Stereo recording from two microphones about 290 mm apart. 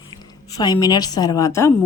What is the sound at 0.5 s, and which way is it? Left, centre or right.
A woman's voice, centre.